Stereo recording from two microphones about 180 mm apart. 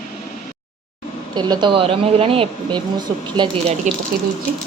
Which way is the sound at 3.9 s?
45° right (ahead or behind).